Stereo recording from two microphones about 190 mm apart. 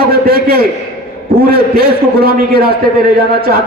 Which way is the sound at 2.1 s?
55° right (ahead or behind).